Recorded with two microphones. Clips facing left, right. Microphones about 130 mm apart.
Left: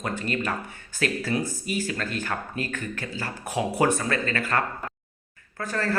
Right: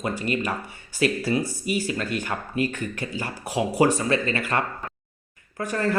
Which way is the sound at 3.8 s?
50° left (ahead or behind).